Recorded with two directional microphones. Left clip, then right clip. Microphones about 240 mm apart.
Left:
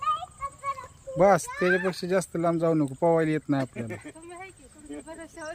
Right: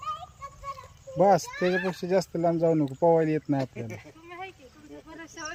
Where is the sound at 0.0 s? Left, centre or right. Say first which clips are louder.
Left 7 dB; right.